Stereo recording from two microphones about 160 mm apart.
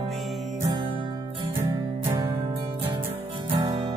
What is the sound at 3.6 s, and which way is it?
Music, 25° right (ahead or behind).